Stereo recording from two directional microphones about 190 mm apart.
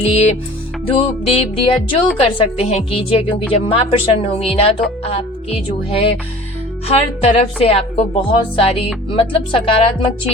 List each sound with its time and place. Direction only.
0.0 s speech: 35° left (ahead or behind)
0.9 s music: 30° left (ahead or behind)
2.2 s speech: 30° left (ahead or behind)
3.5 s music: 30° left (ahead or behind)
5.0 s speech: 30° left (ahead or behind)
9.0 s music: 25° left (ahead or behind)